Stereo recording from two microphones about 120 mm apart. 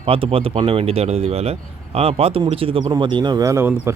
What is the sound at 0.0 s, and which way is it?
A man's voice, 55° right (ahead or behind).